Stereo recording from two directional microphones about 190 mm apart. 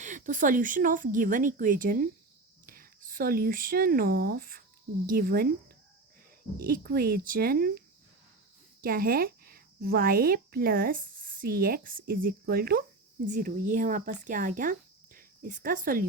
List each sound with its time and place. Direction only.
0.0 s a woman's voice: 40° right (ahead or behind)
6.6 s a woman's voice: 50° right (ahead or behind)